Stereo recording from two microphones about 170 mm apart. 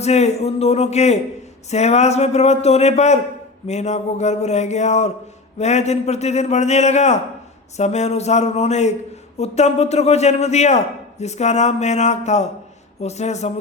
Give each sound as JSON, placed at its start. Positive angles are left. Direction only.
{"t": 0.0, "sound": "a man's voice", "side_deg": 40}